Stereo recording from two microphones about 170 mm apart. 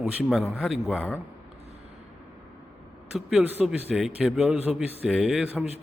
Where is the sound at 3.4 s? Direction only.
5° right (ahead or behind).